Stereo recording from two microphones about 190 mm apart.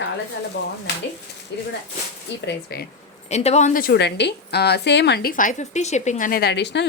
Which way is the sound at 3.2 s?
35° left (ahead or behind).